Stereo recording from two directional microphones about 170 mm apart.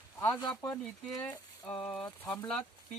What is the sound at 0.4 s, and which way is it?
Speech, 15° left (ahead or behind).